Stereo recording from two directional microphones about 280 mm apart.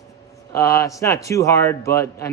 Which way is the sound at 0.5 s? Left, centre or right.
Centre.